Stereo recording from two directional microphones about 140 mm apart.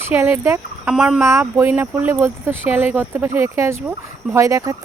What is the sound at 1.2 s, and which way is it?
Speech, 20° right (ahead or behind).